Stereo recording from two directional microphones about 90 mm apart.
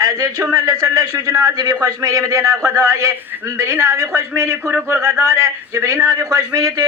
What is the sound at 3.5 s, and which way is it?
A man's voice, 30° right (ahead or behind).